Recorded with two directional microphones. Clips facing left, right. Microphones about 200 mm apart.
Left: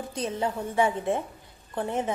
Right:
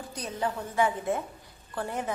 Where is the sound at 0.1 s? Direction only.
25° left (ahead or behind).